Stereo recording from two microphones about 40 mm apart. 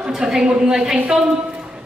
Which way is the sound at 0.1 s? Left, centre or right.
Centre.